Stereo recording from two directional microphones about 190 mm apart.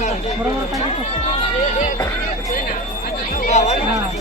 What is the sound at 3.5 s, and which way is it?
Music, 35° left (ahead or behind).